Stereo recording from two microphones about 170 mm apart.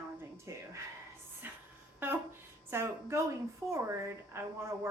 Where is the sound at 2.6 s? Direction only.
15° right (ahead or behind).